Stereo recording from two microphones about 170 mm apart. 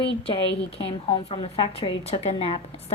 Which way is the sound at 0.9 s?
35° left (ahead or behind).